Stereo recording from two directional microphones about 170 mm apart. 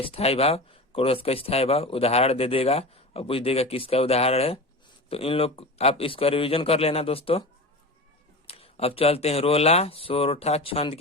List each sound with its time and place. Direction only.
0.0 s speech: 35° left (ahead or behind)
8.4 s speech: 35° left (ahead or behind)